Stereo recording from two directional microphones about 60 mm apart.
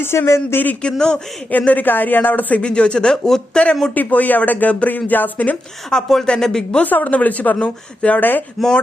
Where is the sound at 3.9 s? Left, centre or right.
Left.